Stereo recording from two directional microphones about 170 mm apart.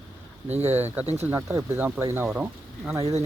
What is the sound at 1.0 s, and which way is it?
Speech, 40° right (ahead or behind).